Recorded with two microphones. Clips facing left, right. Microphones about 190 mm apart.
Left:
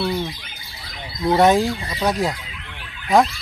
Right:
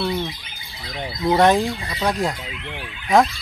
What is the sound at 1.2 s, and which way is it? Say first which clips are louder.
Fowl: left 1 dB; centre (ahead or behind).